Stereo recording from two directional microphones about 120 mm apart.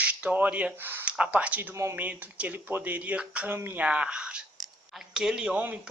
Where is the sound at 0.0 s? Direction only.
10° right (ahead or behind).